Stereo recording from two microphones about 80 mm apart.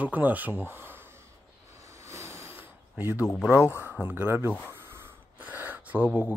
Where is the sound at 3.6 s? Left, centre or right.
Centre.